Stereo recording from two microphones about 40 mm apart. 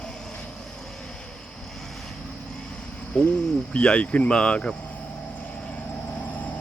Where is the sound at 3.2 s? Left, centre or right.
Left.